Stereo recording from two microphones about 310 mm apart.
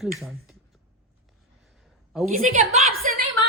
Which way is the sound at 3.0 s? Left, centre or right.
Right.